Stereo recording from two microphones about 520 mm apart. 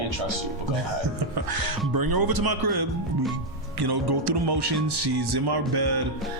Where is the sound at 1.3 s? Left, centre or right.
Right.